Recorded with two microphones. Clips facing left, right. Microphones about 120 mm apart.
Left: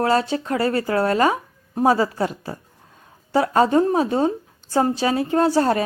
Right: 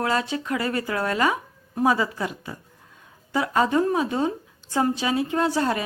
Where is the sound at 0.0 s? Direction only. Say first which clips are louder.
Left 5 dB; 35° left (ahead or behind).